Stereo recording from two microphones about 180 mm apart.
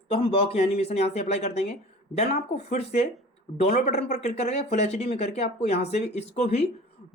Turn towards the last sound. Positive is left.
turn(degrees=40)  # may be behind; listen again after turning